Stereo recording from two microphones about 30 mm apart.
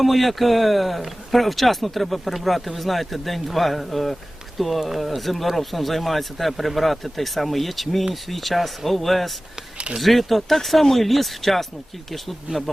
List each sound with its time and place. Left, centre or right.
0.0 s speech: centre
12.5 s speech: right